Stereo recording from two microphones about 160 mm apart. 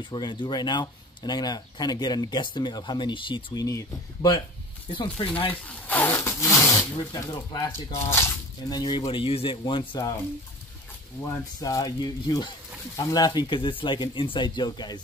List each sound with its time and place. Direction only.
0.0 s speech: 30° left (ahead or behind)
5.2 s speech: 35° left (ahead or behind)
5.5 s a sound: 10° left (ahead or behind)
7.0 s speech: 25° left (ahead or behind)
11.2 s speech: 20° left (ahead or behind)